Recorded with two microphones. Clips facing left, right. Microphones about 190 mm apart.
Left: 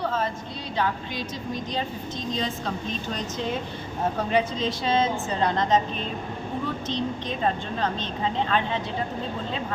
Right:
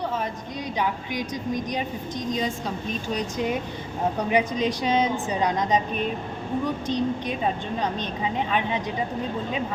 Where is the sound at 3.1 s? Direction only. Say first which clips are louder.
Right 4 dB; 10° right (ahead or behind).